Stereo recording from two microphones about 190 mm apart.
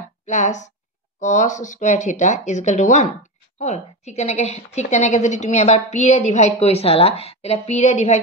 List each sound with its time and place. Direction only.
0.3 s a woman's voice: 40° left (ahead or behind)